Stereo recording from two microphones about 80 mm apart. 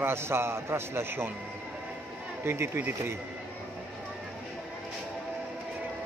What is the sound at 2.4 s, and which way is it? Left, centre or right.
Speech, right.